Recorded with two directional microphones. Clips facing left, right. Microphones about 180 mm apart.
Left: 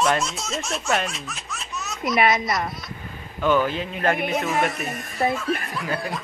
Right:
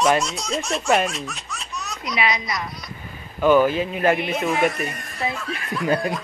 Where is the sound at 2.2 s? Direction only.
55° left (ahead or behind).